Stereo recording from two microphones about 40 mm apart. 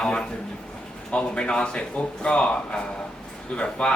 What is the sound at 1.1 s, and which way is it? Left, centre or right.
Speech, left.